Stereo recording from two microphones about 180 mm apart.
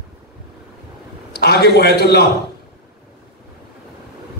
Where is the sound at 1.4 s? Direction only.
65° left (ahead or behind).